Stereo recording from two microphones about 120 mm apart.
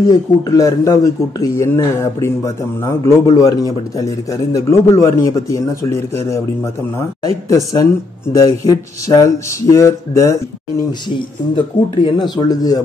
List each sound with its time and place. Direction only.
0.0 s speech: 30° left (ahead or behind)
10.9 s speech: 40° left (ahead or behind)